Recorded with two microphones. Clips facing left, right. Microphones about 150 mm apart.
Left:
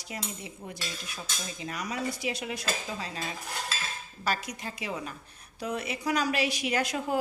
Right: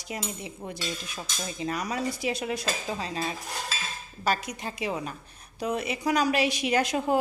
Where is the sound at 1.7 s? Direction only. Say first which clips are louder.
Right 3 dB; 35° right (ahead or behind).